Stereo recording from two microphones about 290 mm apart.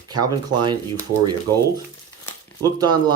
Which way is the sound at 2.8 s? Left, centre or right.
Centre.